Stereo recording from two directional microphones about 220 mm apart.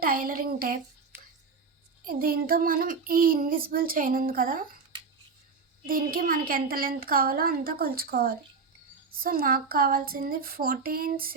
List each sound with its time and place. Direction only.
0.0 s child singing: 40° right (ahead or behind)
2.0 s child singing: 40° right (ahead or behind)
5.8 s child singing: 40° right (ahead or behind)